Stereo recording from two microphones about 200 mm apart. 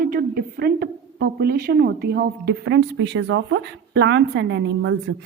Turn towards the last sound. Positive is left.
turn(degrees=-60)  # may be behind; listen again after turning